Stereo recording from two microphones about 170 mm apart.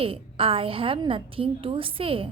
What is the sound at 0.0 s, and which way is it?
A woman's voice, 35° right (ahead or behind).